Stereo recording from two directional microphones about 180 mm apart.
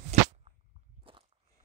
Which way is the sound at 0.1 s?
40° right (ahead or behind).